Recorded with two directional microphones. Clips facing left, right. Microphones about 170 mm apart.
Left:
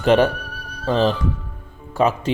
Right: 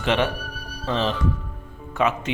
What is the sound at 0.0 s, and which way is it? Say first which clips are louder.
Speech: left 7 dB; 40° left (ahead or behind).